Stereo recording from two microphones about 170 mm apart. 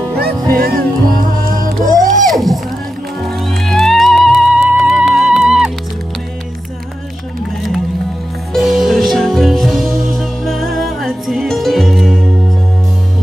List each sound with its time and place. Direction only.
0.2 s music: 60° right (ahead or behind)
2.3 s music: centre (ahead or behind)
3.6 s music: centre (ahead or behind)
8.5 s music: centre (ahead or behind)